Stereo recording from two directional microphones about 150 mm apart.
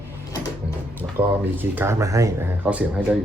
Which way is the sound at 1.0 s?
15° right (ahead or behind).